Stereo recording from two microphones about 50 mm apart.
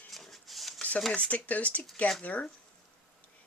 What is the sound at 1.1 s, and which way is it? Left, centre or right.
Speech, left.